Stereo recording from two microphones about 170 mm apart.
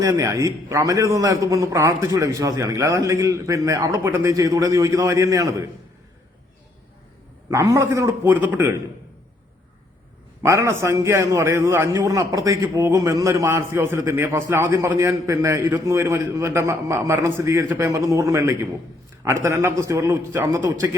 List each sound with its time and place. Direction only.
0.0 s a man's voice: 20° right (ahead or behind)
7.5 s a man's voice: 15° right (ahead or behind)
10.4 s a man's voice: 15° right (ahead or behind)